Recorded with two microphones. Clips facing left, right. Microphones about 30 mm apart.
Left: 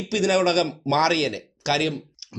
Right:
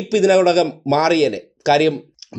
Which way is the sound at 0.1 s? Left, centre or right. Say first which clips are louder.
Right 7 dB; centre.